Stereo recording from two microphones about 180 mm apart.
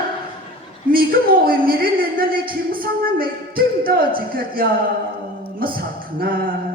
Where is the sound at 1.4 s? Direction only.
55° right (ahead or behind).